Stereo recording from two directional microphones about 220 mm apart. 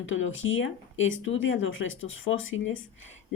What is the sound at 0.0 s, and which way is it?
Speech, 60° left (ahead or behind).